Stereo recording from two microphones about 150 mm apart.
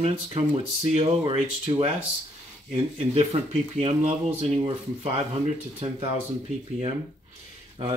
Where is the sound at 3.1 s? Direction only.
45° right (ahead or behind).